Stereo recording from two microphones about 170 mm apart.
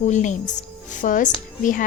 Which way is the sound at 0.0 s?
45° left (ahead or behind).